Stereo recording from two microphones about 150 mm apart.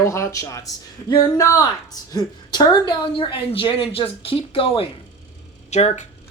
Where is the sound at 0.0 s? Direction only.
20° left (ahead or behind); by 4.9 s 35° left (ahead or behind).